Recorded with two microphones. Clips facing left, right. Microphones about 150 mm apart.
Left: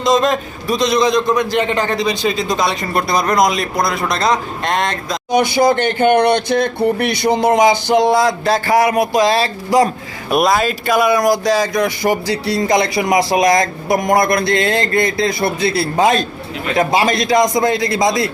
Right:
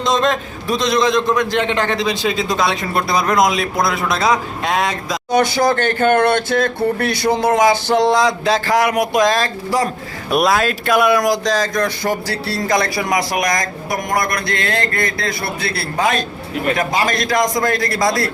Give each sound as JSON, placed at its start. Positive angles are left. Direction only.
{"t": 0.0, "sound": "a man's voice", "side_deg": 0}
{"t": 5.3, "sound": "speech", "side_deg": 15}
{"t": 10.2, "sound": "speech", "side_deg": 0}